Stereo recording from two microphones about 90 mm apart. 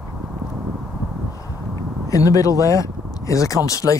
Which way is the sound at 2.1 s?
40° left (ahead or behind).